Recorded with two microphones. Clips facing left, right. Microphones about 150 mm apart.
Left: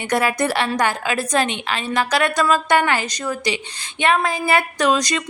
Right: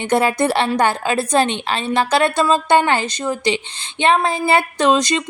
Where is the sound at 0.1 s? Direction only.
25° right (ahead or behind).